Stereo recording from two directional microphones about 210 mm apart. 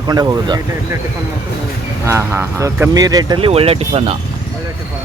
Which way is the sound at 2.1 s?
10° right (ahead or behind).